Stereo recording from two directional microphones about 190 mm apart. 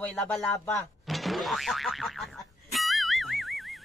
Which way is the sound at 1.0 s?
Centre (ahead or behind).